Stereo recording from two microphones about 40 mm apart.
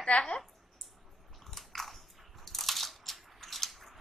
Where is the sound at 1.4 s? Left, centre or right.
Centre.